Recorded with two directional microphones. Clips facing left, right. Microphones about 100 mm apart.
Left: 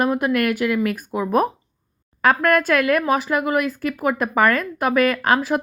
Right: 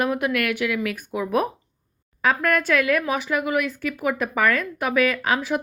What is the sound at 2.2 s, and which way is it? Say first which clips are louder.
A woman's voice: left 4 dB; 50° left (ahead or behind).